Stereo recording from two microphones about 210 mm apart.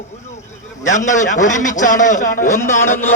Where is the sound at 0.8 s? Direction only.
35° left (ahead or behind).